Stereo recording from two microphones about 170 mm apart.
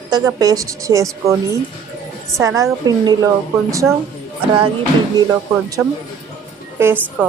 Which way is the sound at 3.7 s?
20° right (ahead or behind).